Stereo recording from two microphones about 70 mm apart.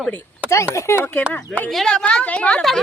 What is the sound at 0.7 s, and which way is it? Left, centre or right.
Speech, left.